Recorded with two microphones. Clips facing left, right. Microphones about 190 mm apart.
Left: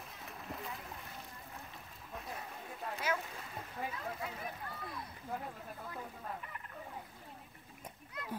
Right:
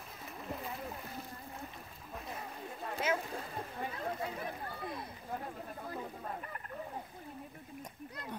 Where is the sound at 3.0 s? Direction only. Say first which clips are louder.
Right 4 dB; 20° right (ahead or behind).